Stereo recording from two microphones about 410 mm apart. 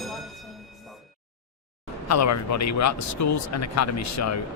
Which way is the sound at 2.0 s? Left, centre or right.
Left.